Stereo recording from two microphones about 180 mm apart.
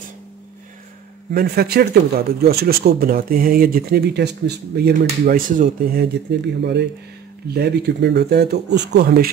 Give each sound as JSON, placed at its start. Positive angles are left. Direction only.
{"t": 1.3, "sound": "speech", "side_deg": -60}
{"t": 5.2, "sound": "speech", "side_deg": -50}
{"t": 6.6, "sound": "speech", "side_deg": -75}